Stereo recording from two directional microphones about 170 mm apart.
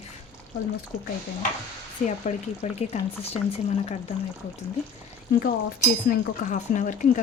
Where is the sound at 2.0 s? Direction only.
50° left (ahead or behind).